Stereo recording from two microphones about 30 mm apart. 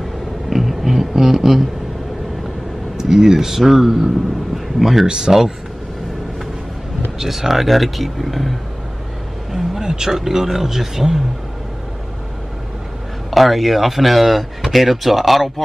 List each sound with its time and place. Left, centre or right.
0.5 s a sound: centre
3.2 s speech: centre
5.0 s speech: right
7.2 s speech: centre
9.5 s vehicle: centre
9.8 s speech: centre
13.3 s speech: centre